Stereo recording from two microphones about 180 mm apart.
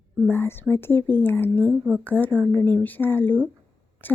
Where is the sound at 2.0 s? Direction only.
10° left (ahead or behind).